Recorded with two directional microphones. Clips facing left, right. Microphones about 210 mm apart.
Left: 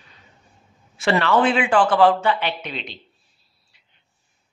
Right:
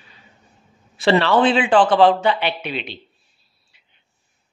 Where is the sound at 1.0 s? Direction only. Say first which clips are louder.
Right 3 dB; 30° right (ahead or behind).